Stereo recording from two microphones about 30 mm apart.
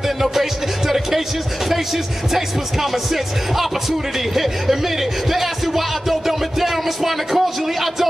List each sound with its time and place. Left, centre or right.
0.2 s music: centre
2.3 s music: centre
5.3 s music: centre